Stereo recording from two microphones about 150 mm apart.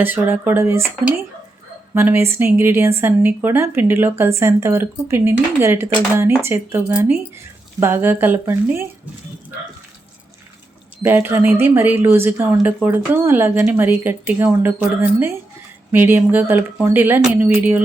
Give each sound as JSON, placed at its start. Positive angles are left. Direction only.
{"t": 0.0, "sound": "a woman's voice", "side_deg": -15}
{"t": 11.0, "sound": "a woman's voice", "side_deg": -15}